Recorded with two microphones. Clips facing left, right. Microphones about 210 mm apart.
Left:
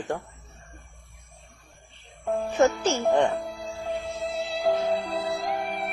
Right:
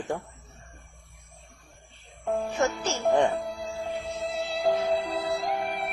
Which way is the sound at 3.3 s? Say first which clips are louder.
Even; centre (ahead or behind).